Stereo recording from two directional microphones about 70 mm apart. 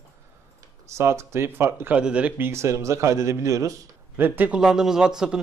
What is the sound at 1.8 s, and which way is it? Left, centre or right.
Speech, centre.